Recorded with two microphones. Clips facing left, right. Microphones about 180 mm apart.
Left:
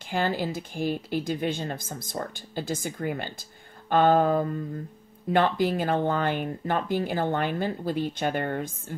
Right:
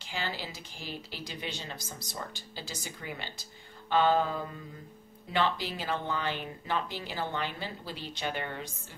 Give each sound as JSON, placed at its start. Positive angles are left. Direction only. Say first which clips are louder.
{"t": 0.1, "sound": "speech", "louder": "left 10 dB", "side_deg": 50}